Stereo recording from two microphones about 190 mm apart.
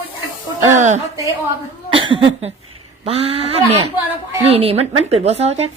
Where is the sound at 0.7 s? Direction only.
35° right (ahead or behind).